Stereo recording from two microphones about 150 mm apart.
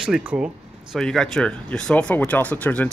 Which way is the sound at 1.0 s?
5° left (ahead or behind).